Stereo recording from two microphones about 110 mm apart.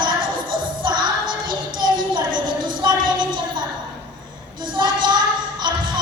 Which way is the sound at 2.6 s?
40° right (ahead or behind).